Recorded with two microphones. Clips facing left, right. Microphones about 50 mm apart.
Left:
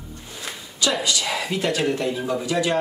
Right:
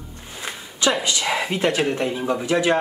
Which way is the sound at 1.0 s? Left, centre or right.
Right.